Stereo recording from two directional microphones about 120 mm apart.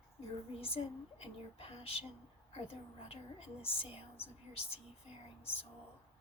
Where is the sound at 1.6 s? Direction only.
55° left (ahead or behind).